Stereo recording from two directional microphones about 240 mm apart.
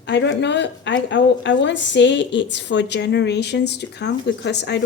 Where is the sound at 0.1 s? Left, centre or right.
Left.